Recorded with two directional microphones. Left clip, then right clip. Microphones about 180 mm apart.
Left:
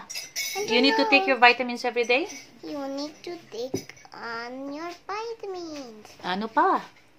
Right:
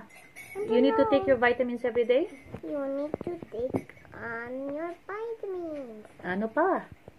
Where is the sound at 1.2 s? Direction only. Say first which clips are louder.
Left 5 dB; 25° left (ahead or behind).